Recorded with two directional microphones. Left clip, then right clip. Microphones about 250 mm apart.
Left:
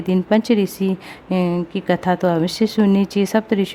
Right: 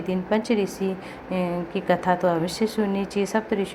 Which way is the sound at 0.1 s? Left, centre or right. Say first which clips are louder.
Left 6 dB; left.